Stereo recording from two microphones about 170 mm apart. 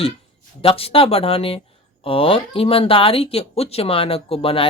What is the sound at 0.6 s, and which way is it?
Speech, 35° left (ahead or behind).